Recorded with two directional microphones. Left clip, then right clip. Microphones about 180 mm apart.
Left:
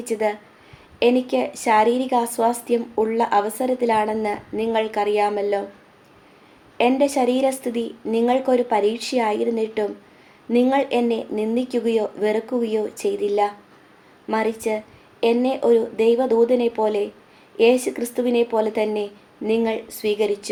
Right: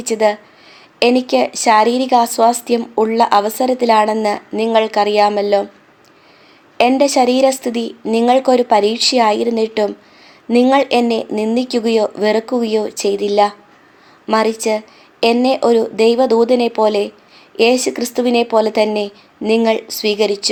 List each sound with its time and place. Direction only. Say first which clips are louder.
0.0 s speech: right 8 dB; 35° right (ahead or behind)
6.7 s speech: right 7 dB; 40° right (ahead or behind)